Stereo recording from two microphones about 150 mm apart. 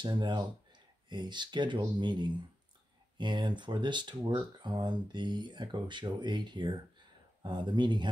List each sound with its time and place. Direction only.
0.0 s speech: 30° right (ahead or behind)